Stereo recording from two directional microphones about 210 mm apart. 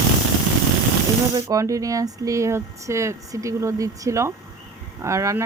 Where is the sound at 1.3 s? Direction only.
15° right (ahead or behind).